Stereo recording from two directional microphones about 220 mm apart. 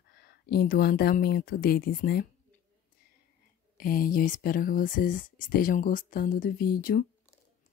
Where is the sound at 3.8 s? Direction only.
40° left (ahead or behind).